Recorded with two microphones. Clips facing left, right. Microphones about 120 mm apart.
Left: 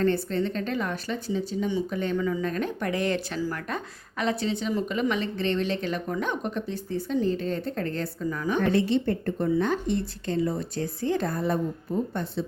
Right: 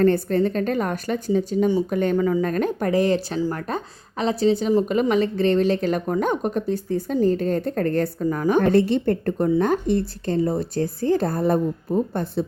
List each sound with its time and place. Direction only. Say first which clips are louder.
0.0 s a woman's voice: right 6 dB; 45° right (ahead or behind)